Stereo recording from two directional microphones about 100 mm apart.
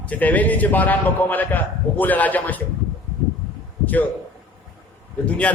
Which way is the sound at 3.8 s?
15° left (ahead or behind).